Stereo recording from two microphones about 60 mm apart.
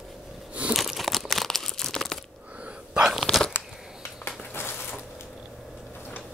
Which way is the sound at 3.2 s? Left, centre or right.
Centre.